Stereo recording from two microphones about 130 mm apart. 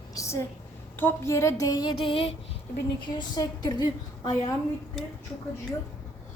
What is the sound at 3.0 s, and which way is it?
Speech, 30° left (ahead or behind).